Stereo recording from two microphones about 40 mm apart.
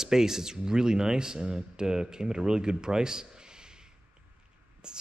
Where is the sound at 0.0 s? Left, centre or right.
Centre.